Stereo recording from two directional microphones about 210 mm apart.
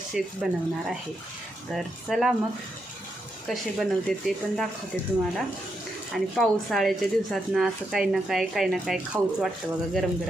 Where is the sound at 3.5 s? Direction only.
Centre (ahead or behind).